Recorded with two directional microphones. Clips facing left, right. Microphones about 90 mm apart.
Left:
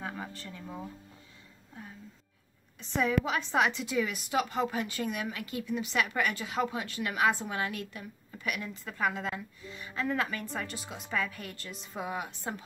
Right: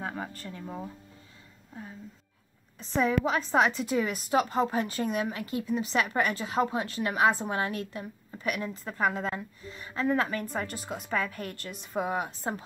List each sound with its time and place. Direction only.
0.0 s speech: 40° right (ahead or behind)
2.8 s a woman's voice: 35° right (ahead or behind)